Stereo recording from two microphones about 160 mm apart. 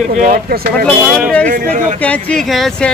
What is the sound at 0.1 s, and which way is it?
Speech, 55° right (ahead or behind).